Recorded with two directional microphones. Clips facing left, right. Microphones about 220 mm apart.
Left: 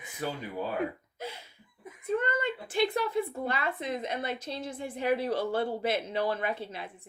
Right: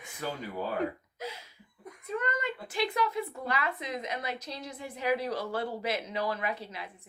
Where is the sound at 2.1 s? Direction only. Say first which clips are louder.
Left 4 dB; 30° left (ahead or behind).